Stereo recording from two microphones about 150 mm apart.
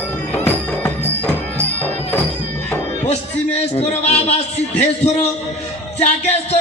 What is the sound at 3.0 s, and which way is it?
A man's voice, 45° left (ahead or behind).